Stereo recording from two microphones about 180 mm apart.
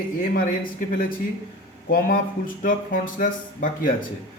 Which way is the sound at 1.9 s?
55° left (ahead or behind).